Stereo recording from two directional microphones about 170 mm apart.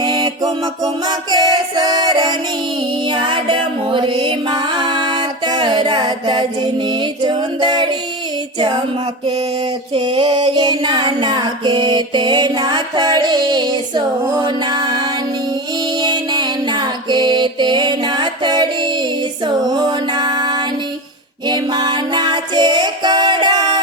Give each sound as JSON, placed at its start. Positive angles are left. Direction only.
{"t": 0.0, "sound": "music", "side_deg": -25}
{"t": 1.0, "sound": "female singing", "side_deg": -25}
{"t": 9.9, "sound": "female singing", "side_deg": -30}
{"t": 16.0, "sound": "music", "side_deg": -25}